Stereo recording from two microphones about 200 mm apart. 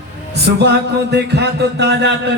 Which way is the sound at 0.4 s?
55° right (ahead or behind).